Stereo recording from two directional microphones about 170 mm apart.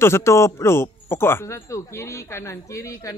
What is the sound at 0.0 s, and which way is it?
Speech, 15° left (ahead or behind).